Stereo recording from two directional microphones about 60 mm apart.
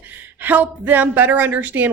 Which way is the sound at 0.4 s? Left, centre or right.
Right.